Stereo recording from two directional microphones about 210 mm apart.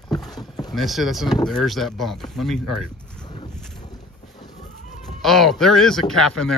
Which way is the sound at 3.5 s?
Centre (ahead or behind).